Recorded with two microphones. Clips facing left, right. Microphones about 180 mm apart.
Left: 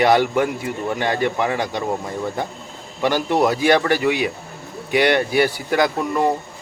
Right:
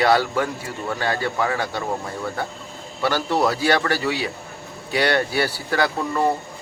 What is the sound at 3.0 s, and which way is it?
Speech, 15° left (ahead or behind).